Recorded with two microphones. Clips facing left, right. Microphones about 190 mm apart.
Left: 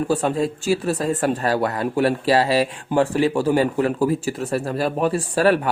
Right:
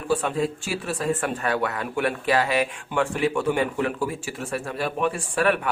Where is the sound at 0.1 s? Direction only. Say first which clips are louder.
Left 3 dB; 40° left (ahead or behind).